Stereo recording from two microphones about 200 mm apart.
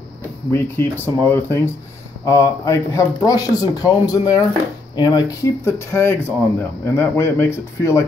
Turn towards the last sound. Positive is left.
turn(degrees=15)  # may be behind; listen again after turning